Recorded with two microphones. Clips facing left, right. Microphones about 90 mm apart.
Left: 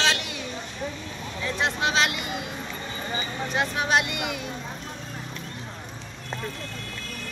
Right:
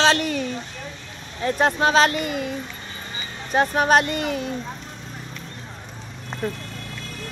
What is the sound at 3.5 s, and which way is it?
Speech, 45° right (ahead or behind).